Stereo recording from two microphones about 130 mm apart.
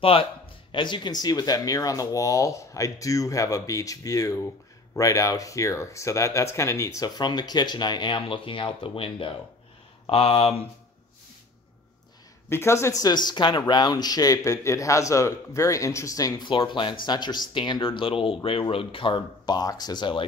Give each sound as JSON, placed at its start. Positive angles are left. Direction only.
{"t": 0.0, "sound": "speech", "side_deg": 45}
{"t": 12.4, "sound": "speech", "side_deg": 20}